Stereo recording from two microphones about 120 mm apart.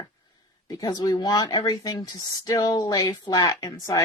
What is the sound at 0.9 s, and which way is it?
Speech, 40° left (ahead or behind).